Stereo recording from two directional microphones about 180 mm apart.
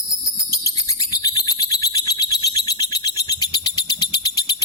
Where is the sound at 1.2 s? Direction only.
20° left (ahead or behind).